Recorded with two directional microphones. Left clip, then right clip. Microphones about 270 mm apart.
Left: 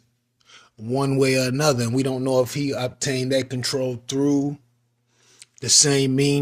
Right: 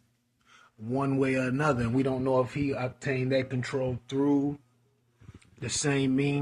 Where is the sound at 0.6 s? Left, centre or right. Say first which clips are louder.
Left 7 dB; left.